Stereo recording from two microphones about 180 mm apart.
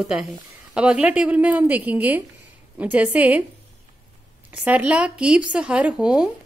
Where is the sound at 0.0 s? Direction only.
Centre (ahead or behind).